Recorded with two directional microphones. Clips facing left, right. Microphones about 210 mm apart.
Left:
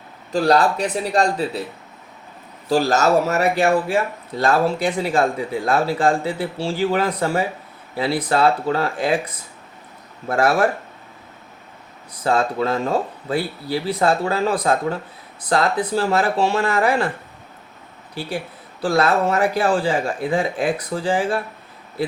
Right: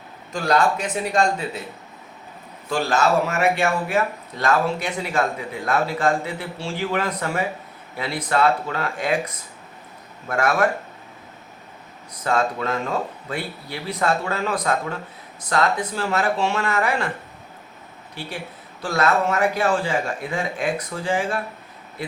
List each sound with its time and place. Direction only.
0.3 s speech: 35° left (ahead or behind)
2.6 s speech: 40° left (ahead or behind)
12.2 s speech: 30° left (ahead or behind)
18.8 s speech: 35° left (ahead or behind)